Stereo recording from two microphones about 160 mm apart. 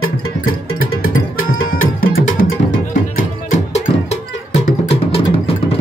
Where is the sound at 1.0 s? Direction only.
60° left (ahead or behind).